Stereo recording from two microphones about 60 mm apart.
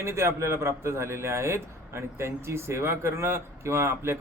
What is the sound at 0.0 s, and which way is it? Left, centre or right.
Speech, right.